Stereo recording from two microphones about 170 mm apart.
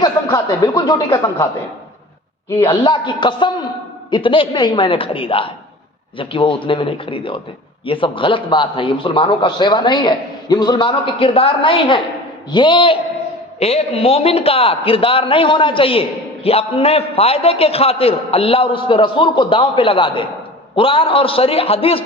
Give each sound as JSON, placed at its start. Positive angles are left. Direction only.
{"t": 0.0, "sound": "a man's voice", "side_deg": 20}
{"t": 2.8, "sound": "a man's voice", "side_deg": 25}